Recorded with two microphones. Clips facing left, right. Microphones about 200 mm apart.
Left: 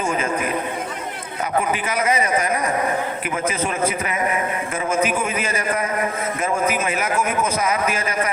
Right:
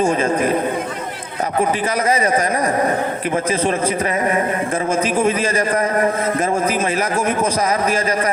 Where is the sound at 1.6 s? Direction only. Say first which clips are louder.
Right 3 dB; 35° right (ahead or behind).